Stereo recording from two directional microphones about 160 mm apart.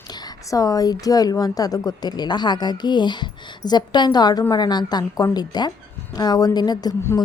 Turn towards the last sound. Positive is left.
turn(degrees=20)  # may be behind; listen again after turning